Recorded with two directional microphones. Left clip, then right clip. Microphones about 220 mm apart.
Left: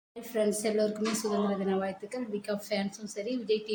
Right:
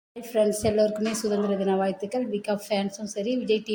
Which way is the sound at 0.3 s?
20° right (ahead or behind).